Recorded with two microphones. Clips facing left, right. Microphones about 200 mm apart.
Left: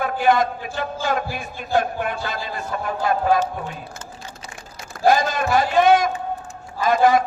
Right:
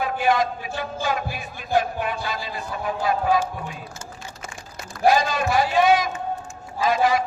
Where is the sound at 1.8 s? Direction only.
50° left (ahead or behind).